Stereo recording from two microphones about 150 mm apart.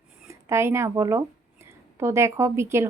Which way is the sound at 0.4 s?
15° right (ahead or behind).